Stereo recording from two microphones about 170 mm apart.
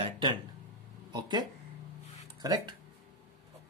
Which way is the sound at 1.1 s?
25° right (ahead or behind).